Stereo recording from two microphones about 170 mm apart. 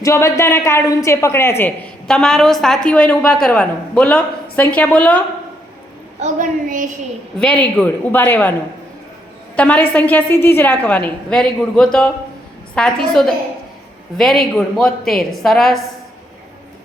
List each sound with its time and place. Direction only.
0.0 s a woman's voice: 20° left (ahead or behind)
2.0 s a woman's voice: 5° left (ahead or behind)
6.1 s a woman's voice: 45° right (ahead or behind)
7.3 s a woman's voice: 5° left (ahead or behind)
9.6 s a woman's voice: 10° left (ahead or behind)